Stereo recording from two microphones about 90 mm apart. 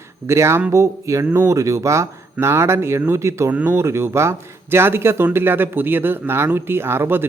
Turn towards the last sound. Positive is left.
turn(degrees=-25)  # may be behind; listen again after turning